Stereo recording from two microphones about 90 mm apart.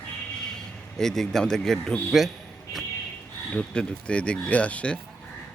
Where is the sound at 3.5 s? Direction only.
15° left (ahead or behind).